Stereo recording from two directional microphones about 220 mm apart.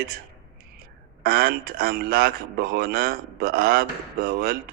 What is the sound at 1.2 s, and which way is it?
Speech, 40° right (ahead or behind).